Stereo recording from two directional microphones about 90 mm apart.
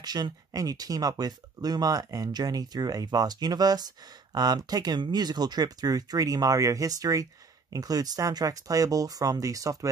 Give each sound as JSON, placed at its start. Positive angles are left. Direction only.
{"t": 0.0, "sound": "speech", "side_deg": -50}